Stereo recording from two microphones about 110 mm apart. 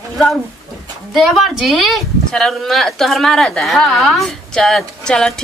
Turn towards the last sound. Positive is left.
turn(degrees=5)  # may be behind; listen again after turning